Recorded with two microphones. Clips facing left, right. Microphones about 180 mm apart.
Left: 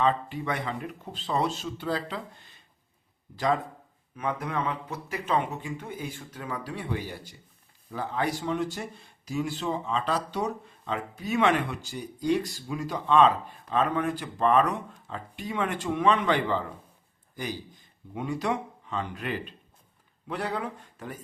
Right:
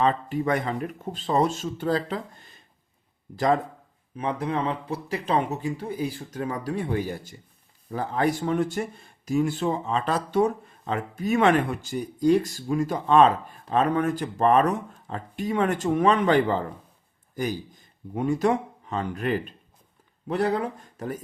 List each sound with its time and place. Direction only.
0.0 s speech: 45° right (ahead or behind)
4.2 s speech: 30° right (ahead or behind)